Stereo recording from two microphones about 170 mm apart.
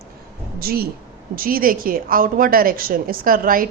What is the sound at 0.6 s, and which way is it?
A woman's voice, 60° right (ahead or behind).